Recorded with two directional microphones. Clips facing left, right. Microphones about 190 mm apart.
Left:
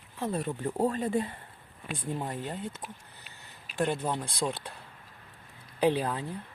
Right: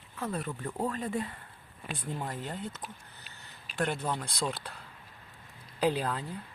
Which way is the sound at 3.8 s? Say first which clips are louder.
Left 3 dB; 15° left (ahead or behind).